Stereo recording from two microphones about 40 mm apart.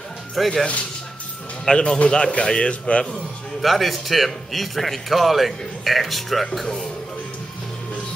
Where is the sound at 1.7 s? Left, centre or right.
Left.